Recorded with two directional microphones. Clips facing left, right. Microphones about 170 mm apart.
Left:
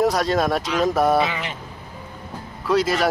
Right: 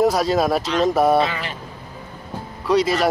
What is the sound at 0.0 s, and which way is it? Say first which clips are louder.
Speech: right 2 dB; centre (ahead or behind).